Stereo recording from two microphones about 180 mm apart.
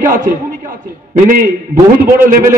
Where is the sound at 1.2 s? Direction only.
55° right (ahead or behind).